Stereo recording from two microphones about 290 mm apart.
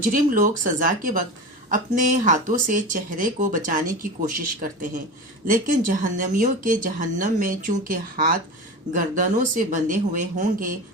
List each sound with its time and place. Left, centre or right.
0.1 s speech: right